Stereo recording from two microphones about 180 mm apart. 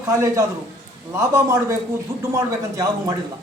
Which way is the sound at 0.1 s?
15° right (ahead or behind).